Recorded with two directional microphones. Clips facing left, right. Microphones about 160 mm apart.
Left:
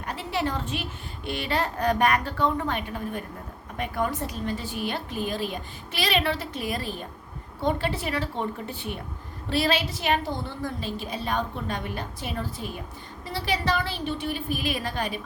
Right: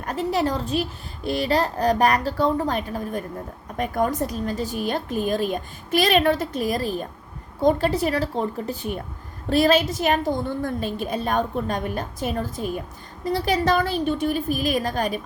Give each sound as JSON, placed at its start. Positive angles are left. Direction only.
{"t": 0.0, "sound": "a child's voice", "side_deg": -45}